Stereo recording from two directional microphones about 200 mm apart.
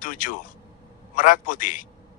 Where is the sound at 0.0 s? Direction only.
40° left (ahead or behind).